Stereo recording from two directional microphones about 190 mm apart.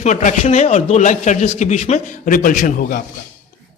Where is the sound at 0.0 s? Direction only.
40° left (ahead or behind).